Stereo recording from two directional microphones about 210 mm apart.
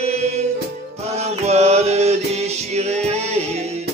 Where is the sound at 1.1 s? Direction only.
30° right (ahead or behind).